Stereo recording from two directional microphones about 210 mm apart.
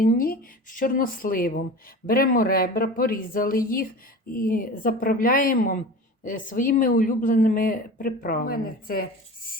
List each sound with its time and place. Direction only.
0.0 s speech: 45° left (ahead or behind)